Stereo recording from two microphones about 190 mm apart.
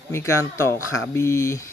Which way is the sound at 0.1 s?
15° left (ahead or behind).